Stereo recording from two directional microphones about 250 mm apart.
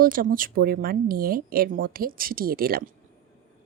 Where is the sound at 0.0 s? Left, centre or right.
Right.